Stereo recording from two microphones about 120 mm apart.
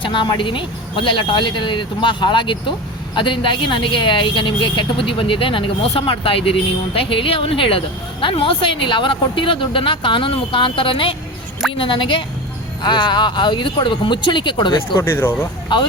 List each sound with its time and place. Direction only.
0.0 s speech: 40° left (ahead or behind)
14.9 s speech: 20° left (ahead or behind)
15.7 s speech: 40° left (ahead or behind)